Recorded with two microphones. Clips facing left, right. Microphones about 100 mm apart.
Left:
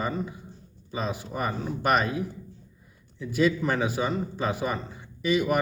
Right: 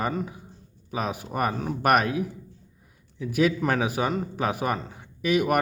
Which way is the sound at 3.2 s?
60° right (ahead or behind).